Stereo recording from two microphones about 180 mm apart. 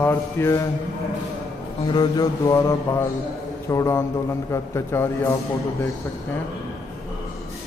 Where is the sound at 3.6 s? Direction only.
15° left (ahead or behind).